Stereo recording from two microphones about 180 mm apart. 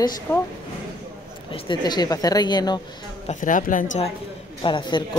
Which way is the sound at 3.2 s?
45° left (ahead or behind).